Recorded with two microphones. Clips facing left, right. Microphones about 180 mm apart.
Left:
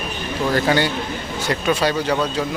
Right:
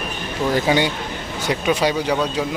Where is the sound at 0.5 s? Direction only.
15° right (ahead or behind).